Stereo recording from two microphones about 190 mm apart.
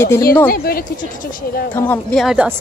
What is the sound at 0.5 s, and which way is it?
Speech, 50° left (ahead or behind).